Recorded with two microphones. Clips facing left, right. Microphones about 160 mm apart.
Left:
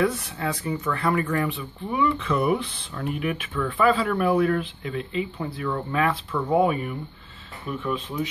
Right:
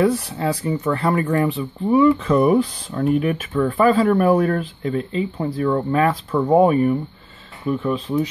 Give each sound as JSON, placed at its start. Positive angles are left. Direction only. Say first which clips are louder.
{"t": 0.0, "sound": "speech", "louder": "right 6 dB", "side_deg": -35}